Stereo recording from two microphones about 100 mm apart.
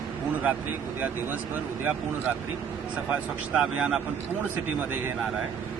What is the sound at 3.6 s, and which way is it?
Speech, 5° right (ahead or behind).